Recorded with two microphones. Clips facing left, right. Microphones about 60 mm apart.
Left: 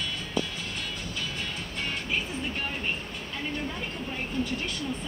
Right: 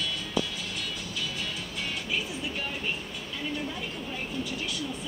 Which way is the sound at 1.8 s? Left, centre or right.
Left.